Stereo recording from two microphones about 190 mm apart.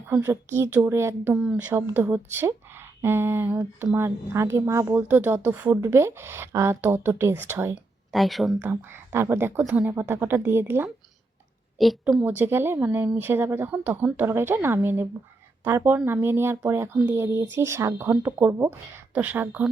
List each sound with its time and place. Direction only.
0.1 s speech: 10° right (ahead or behind)
8.1 s speech: centre (ahead or behind)
11.8 s speech: centre (ahead or behind)